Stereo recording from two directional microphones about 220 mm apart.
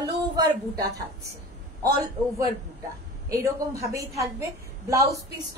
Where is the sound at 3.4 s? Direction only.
15° right (ahead or behind).